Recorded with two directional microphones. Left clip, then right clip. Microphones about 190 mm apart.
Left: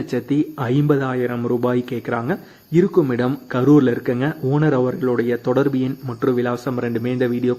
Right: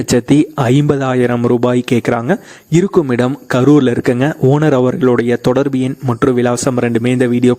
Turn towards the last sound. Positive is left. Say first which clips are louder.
# right 7 dB
turn(degrees=-55)  # may be behind; listen again after turning